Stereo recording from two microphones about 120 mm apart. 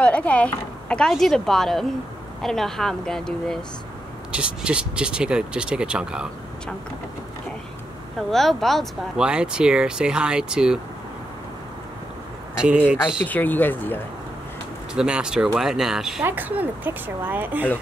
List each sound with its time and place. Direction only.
0.0 s speech: 10° left (ahead or behind)
4.3 s speech: 10° right (ahead or behind)
8.2 s speech: centre (ahead or behind)
12.5 s speech: 10° right (ahead or behind)
13.2 s speech: 15° left (ahead or behind)
15.0 s speech: 5° right (ahead or behind)
16.3 s speech: 15° right (ahead or behind)